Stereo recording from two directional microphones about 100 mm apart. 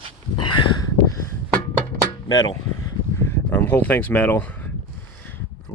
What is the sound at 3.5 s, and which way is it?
Speech, 20° left (ahead or behind).